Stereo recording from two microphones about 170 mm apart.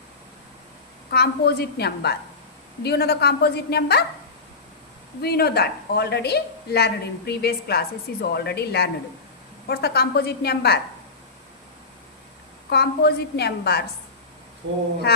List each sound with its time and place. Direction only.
1.1 s a woman's voice: 70° left (ahead or behind)
5.2 s a woman's voice: 65° left (ahead or behind)
12.7 s a woman's voice: 70° left (ahead or behind)